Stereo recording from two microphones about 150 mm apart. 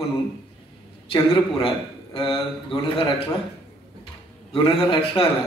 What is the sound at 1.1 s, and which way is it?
Speech, 35° left (ahead or behind).